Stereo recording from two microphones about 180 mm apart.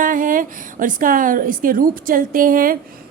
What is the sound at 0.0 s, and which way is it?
A woman's voice, 50° right (ahead or behind).